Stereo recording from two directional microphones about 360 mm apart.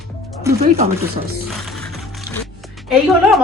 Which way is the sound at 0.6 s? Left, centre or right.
Centre.